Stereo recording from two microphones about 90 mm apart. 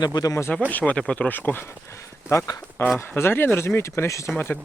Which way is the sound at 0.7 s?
15° left (ahead or behind).